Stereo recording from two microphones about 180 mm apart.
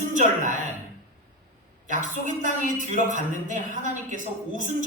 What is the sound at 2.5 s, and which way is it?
A man's voice, 45° right (ahead or behind).